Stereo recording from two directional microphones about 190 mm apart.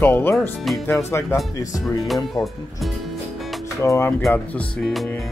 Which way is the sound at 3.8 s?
15° left (ahead or behind).